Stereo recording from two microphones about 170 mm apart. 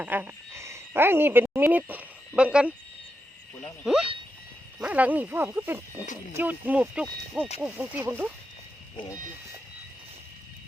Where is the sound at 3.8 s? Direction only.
5° right (ahead or behind).